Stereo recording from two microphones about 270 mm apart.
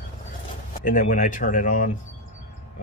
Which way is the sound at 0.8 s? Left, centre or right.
Left.